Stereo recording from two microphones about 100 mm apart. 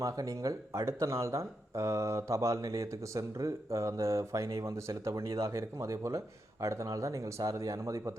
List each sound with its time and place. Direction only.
0.0 s speech: 35° right (ahead or behind)